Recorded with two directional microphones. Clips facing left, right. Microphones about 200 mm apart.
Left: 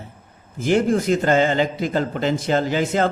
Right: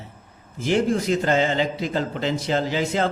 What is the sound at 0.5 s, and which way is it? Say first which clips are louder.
A man's voice: left 3 dB; 50° left (ahead or behind).